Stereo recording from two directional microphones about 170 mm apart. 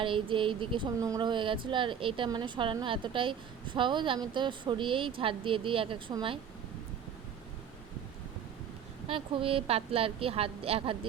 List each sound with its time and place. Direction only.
0.0 s speech: 30° right (ahead or behind)
9.0 s a woman's voice: 30° right (ahead or behind)